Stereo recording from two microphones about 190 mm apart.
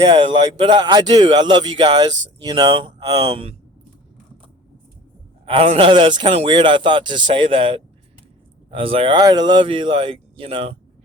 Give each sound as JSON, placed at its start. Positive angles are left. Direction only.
{"t": 0.1, "sound": "a man's voice", "side_deg": -25}
{"t": 5.5, "sound": "a man's voice", "side_deg": -30}